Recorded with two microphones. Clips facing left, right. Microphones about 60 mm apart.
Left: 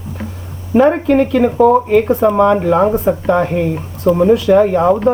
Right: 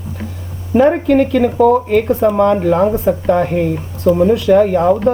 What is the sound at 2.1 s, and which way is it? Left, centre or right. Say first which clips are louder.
Speech: left 1 dB; centre.